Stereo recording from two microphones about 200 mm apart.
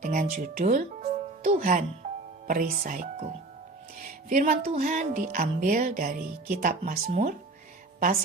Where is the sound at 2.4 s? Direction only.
45° right (ahead or behind).